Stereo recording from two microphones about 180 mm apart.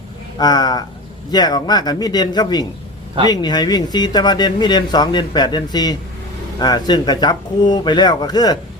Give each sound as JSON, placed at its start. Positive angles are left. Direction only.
{"t": 0.3, "sound": "speech", "side_deg": 20}